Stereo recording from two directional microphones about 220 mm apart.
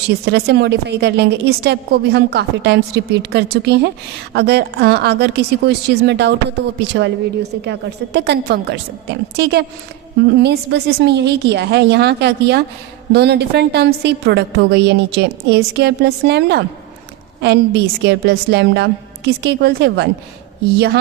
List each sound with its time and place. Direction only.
0.3 s a woman's voice: 50° right (ahead or behind)